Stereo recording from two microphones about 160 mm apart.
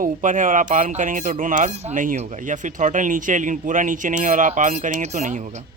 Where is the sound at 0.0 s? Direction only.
55° right (ahead or behind).